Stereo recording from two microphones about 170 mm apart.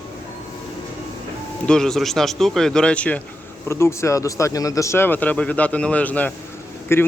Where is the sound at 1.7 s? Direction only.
5° left (ahead or behind).